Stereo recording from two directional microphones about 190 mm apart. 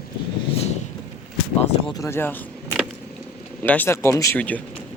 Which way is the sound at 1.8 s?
20° left (ahead or behind).